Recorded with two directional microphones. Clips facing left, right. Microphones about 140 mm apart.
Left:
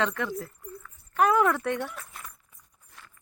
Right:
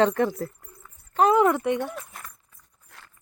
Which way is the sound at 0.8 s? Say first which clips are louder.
Right 3 dB; 25° right (ahead or behind).